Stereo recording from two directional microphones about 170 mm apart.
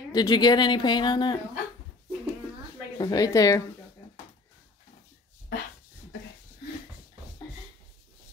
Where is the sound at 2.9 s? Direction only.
20° left (ahead or behind).